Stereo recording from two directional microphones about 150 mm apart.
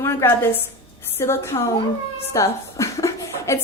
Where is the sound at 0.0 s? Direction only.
15° left (ahead or behind).